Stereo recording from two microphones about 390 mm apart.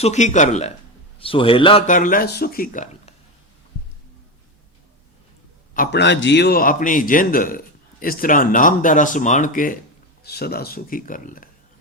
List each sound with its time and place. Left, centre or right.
0.0 s a man's voice: centre
5.7 s a man's voice: left